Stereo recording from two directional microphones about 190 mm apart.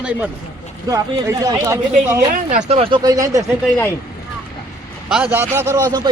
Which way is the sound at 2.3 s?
40° right (ahead or behind).